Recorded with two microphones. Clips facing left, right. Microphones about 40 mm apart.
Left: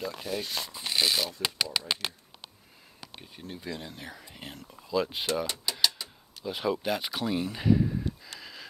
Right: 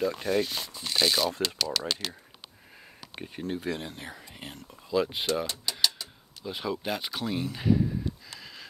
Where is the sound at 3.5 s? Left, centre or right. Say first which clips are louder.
Right 5 dB; right.